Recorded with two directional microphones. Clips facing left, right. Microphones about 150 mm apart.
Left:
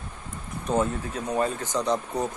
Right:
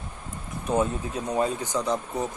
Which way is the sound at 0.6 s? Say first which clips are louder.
Even; 15° right (ahead or behind).